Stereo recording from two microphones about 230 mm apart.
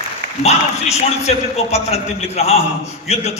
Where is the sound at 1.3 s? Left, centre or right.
Left.